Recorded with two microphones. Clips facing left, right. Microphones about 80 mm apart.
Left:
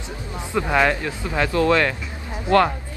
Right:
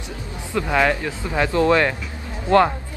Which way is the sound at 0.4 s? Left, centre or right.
Centre.